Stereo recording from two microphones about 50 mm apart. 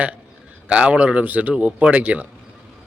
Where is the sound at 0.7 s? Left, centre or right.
Right.